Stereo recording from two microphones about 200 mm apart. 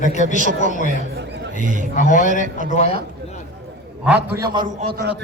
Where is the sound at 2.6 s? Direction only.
35° left (ahead or behind).